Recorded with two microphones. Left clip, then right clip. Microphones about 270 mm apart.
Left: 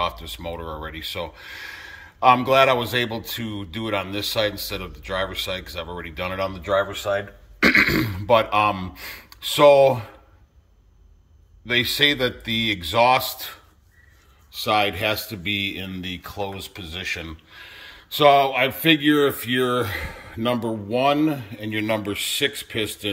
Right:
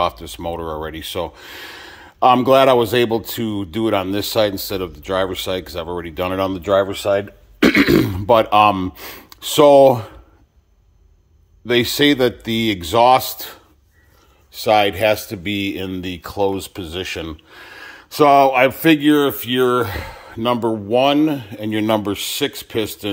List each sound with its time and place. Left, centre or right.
0.0 s speech: right
11.6 s speech: right